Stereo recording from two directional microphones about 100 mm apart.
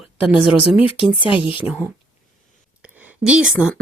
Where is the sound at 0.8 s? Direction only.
65° left (ahead or behind).